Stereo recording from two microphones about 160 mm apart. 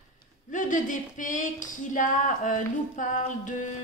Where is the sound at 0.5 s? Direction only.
55° left (ahead or behind).